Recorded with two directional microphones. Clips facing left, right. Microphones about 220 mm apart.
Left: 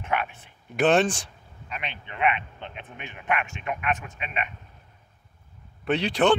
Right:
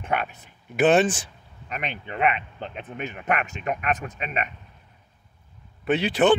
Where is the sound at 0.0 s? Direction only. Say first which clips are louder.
Right 1 dB; 35° right (ahead or behind).